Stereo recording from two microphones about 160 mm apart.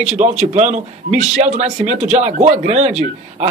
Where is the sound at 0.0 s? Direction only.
45° right (ahead or behind).